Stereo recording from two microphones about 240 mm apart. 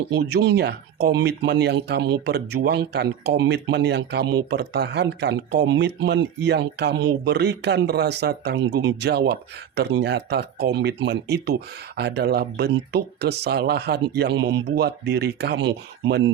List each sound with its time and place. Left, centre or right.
0.1 s speech: right